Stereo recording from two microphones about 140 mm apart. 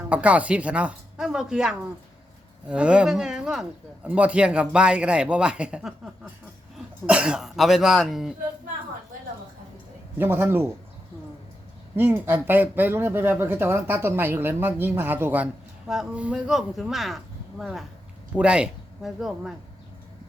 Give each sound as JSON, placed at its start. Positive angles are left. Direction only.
{"t": 0.1, "sound": "speech", "side_deg": -10}
{"t": 10.2, "sound": "speech", "side_deg": -15}
{"t": 11.9, "sound": "speech", "side_deg": -15}